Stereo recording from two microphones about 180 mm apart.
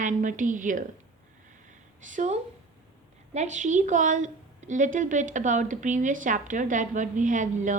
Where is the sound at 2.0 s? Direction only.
45° right (ahead or behind).